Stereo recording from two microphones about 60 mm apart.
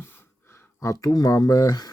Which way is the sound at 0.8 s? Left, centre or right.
Left.